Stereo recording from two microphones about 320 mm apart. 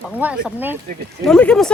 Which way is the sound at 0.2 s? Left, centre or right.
Centre.